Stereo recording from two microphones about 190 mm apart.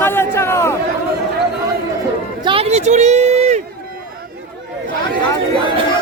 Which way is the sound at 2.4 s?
30° right (ahead or behind).